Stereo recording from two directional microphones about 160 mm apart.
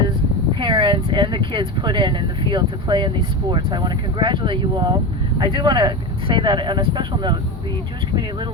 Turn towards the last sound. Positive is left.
turn(degrees=-30)  # may be behind; listen again after turning